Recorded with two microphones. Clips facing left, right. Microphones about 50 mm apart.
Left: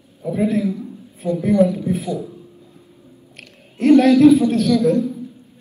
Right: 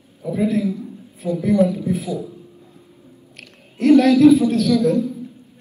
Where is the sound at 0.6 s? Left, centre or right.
Left.